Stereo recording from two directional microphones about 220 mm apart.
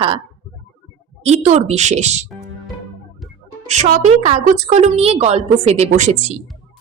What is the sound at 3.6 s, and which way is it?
A woman's voice, 30° right (ahead or behind).